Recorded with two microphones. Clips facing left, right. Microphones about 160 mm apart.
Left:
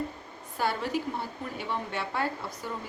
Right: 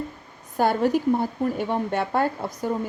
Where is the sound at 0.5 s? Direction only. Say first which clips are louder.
Right 9 dB; 45° right (ahead or behind).